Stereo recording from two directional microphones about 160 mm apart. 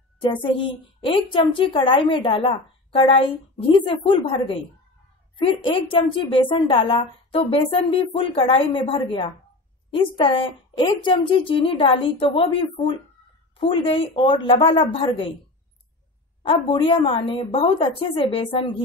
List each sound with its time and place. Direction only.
0.2 s a woman's voice: 30° left (ahead or behind)
16.4 s a woman's voice: 35° left (ahead or behind)